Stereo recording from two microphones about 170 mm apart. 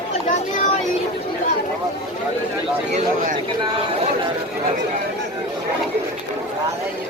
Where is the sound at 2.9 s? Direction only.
50° right (ahead or behind).